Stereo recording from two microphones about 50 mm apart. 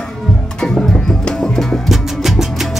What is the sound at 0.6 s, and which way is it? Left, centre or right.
Music, centre.